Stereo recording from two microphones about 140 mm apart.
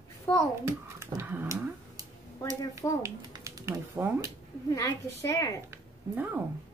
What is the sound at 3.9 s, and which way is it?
Speech, 15° right (ahead or behind).